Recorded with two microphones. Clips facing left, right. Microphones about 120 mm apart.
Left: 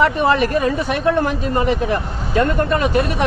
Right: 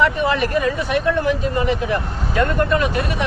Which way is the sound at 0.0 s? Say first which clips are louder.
Left 3 dB; 35° left (ahead or behind).